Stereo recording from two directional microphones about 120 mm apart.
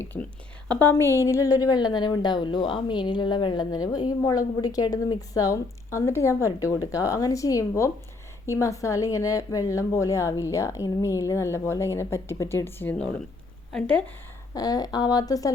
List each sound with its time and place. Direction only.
0.8 s a woman's voice: 20° left (ahead or behind)
14.5 s a woman's voice: 30° left (ahead or behind)